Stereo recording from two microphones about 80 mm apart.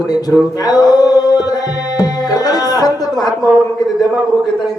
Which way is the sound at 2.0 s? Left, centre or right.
Left.